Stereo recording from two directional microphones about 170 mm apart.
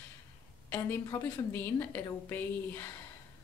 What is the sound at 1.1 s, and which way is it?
A woman's voice, 15° left (ahead or behind).